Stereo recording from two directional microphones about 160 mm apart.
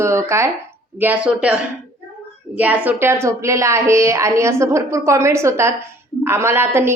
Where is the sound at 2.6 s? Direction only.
10° right (ahead or behind).